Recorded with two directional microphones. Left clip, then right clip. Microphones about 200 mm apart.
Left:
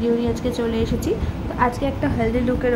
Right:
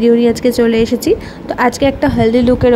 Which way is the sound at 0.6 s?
35° right (ahead or behind).